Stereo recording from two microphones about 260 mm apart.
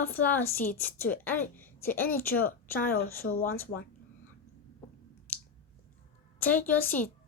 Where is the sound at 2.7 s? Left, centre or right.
Left.